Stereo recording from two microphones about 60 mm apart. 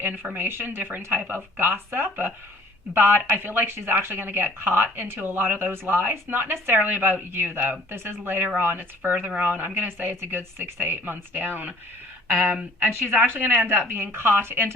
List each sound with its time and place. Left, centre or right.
0.3 s speech: right